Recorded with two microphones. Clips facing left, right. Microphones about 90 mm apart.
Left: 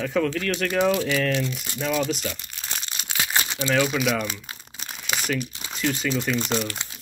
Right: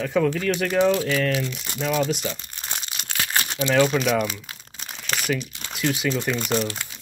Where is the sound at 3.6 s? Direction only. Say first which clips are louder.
Right 3 dB; centre (ahead or behind).